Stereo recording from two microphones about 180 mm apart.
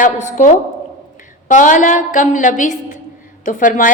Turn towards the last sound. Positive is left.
turn(degrees=45)  # may be behind; listen again after turning